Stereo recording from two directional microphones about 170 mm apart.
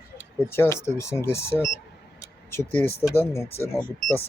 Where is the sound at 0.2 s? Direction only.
15° left (ahead or behind).